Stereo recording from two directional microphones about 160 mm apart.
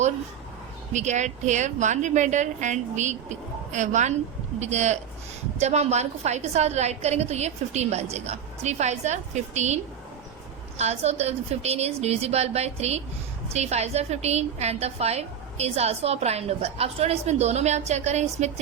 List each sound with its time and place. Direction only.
0.9 s a woman's voice: 45° right (ahead or behind)